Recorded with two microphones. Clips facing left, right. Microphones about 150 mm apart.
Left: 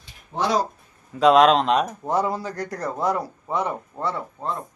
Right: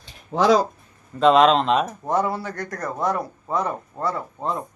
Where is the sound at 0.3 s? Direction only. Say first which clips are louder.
Right 5 dB; 90° right.